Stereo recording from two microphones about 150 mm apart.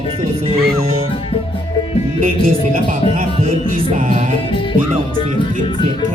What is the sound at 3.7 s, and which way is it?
Music, 60° right (ahead or behind).